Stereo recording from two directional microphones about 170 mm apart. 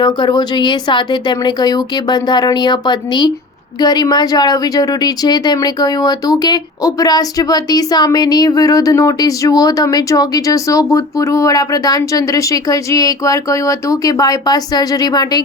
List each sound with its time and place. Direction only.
0.0 s a woman's voice: 25° left (ahead or behind)